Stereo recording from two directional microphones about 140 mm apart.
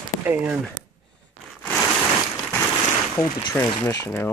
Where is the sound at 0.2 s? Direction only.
10° right (ahead or behind).